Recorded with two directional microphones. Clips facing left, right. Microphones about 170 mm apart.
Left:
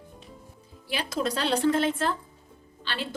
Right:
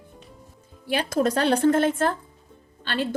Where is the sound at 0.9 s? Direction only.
50° right (ahead or behind).